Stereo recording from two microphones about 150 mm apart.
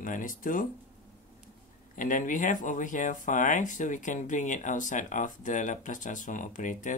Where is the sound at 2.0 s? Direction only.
60° left (ahead or behind).